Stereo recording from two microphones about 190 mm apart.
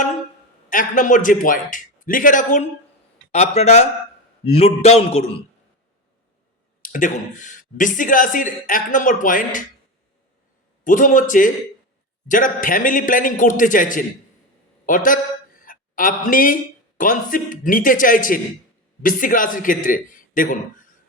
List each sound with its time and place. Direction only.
0.7 s a man's voice: 45° left (ahead or behind)
6.8 s speech: 45° left (ahead or behind)
10.8 s speech: 45° left (ahead or behind)
15.6 s a sound: 45° left (ahead or behind)
17.0 s speech: 45° left (ahead or behind)